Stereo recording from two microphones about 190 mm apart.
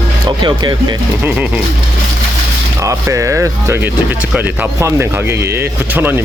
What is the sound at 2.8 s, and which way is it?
Speech, 15° right (ahead or behind).